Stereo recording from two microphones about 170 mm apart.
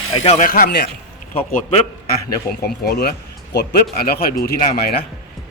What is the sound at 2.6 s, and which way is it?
Speech, 65° left (ahead or behind).